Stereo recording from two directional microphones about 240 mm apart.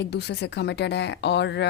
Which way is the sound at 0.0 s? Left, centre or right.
Left.